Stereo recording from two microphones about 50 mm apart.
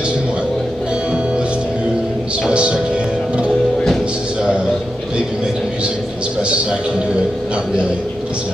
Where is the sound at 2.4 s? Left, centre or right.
Centre.